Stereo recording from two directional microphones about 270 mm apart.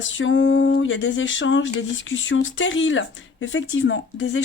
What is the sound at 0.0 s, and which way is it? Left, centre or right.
Speech, left.